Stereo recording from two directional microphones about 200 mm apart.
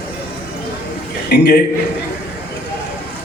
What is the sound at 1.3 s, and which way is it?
Speech, 50° left (ahead or behind).